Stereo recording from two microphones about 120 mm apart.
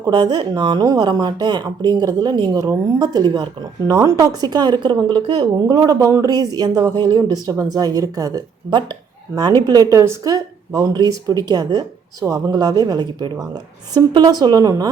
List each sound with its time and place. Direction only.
0.0 s speech: 35° right (ahead or behind)